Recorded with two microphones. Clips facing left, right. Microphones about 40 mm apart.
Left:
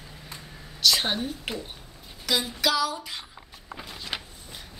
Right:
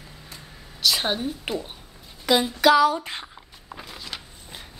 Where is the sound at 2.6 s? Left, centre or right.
Right.